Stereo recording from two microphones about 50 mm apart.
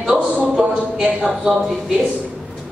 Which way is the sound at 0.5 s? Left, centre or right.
Centre.